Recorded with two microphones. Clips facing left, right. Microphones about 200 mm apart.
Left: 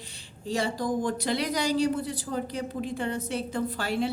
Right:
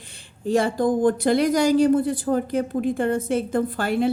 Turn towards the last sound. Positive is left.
turn(degrees=-50)  # may be behind; listen again after turning